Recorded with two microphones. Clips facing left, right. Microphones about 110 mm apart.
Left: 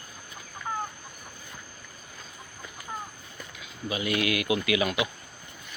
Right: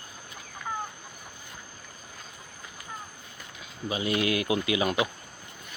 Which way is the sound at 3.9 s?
30° right (ahead or behind).